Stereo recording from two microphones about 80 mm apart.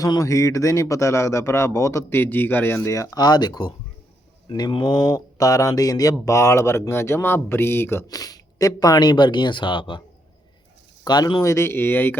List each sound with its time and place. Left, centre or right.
0.0 s a man's voice: left
2.9 s a man's voice: left
3.2 s speech: left
4.4 s speech: left
6.2 s a man's voice: left
8.0 s speech: left
11.0 s speech: left
11.4 s speech: left